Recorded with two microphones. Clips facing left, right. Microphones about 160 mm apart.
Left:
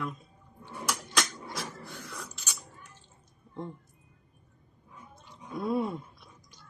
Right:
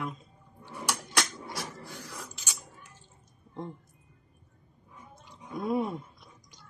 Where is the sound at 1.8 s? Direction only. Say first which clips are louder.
Even; 5° right (ahead or behind).